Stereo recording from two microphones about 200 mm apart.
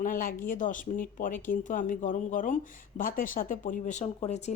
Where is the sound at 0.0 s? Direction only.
45° left (ahead or behind).